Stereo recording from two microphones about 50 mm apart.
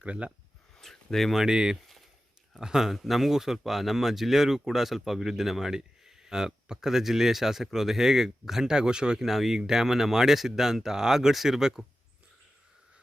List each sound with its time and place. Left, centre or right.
0.0 s speech: right
0.8 s speech: centre
1.4 s speech: centre